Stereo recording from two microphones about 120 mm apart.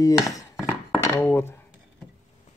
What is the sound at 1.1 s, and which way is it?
Speech, 20° left (ahead or behind).